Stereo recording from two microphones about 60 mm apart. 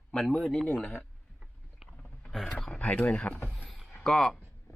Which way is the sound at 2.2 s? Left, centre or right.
Centre.